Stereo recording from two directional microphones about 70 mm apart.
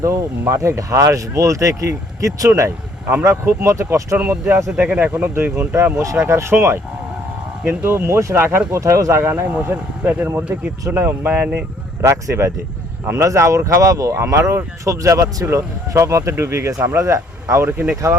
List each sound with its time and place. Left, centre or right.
0.4 s speech: right
0.8 s speech: right
4.2 s speech: right
4.8 s speech: centre
5.5 s speech: right
9.2 s speech: right
10.2 s speech: right
12.0 s speech: right
14.2 s speech: right
17.7 s speech: right